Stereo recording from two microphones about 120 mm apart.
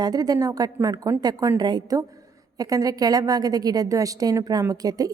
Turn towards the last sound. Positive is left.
turn(degrees=-30)  # may be behind; listen again after turning